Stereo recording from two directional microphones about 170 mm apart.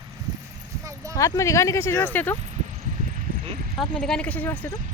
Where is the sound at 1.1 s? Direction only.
20° left (ahead or behind).